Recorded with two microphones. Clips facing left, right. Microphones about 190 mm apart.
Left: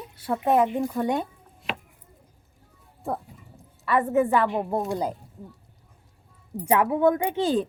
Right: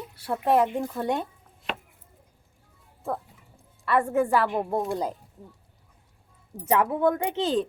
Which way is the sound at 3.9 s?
5° left (ahead or behind).